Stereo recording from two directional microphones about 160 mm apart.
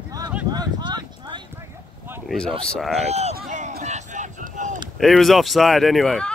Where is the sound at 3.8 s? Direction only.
45° right (ahead or behind).